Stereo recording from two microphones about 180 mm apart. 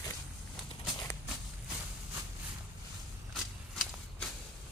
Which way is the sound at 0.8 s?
20° left (ahead or behind).